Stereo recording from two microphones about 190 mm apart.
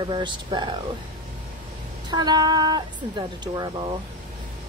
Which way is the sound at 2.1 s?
20° right (ahead or behind).